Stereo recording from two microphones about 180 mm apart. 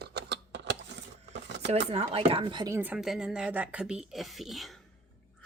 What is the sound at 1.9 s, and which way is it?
Speech, 30° right (ahead or behind).